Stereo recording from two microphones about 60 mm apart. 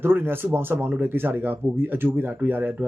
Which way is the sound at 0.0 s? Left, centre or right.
Right.